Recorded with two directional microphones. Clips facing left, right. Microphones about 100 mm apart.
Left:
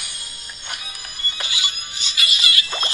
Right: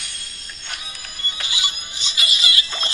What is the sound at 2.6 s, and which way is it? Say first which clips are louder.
Rodents: left 2 dB; 40° left (ahead or behind).